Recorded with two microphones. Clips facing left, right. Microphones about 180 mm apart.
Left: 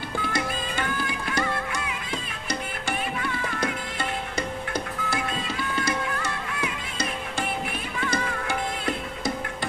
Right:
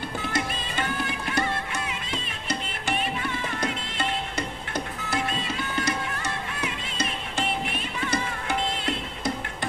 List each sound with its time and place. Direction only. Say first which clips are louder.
1.0 s music: even; 25° right (ahead or behind)
8.0 s music: left 1 dB; 20° right (ahead or behind)